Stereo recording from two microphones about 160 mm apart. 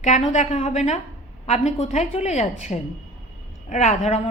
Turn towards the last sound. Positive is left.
turn(degrees=45)  # may be behind; listen again after turning